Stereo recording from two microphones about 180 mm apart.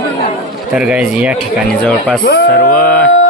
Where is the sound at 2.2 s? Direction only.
60° left (ahead or behind).